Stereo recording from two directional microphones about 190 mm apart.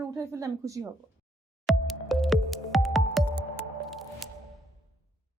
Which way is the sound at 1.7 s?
Centre (ahead or behind).